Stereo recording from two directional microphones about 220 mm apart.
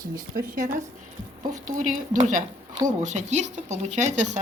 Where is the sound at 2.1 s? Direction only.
35° right (ahead or behind).